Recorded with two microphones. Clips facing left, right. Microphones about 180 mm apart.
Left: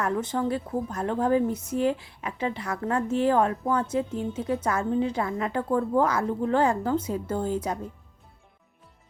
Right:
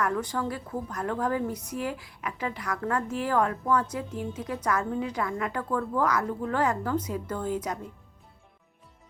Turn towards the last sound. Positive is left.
turn(degrees=30)  # may be behind; listen again after turning